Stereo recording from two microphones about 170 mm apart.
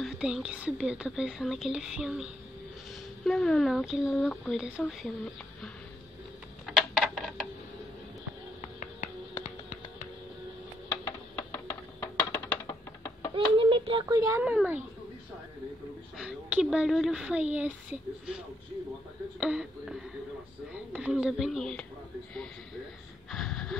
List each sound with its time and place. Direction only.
0.0 s speech: 5° right (ahead or behind)
3.3 s speech: 5° left (ahead or behind)
6.6 s a sound: centre (ahead or behind)
8.5 s finger snapping: 45° left (ahead or behind)
11.1 s a sound: 20° left (ahead or behind)
12.6 s music: 20° left (ahead or behind)
13.3 s a sound: 30° right (ahead or behind)
14.1 s speech: 20° right (ahead or behind)
14.4 s speech: 5° right (ahead or behind)
16.2 s speech: 5° right (ahead or behind)
19.4 s speech: 5° right (ahead or behind)
23.3 s gasp: centre (ahead or behind)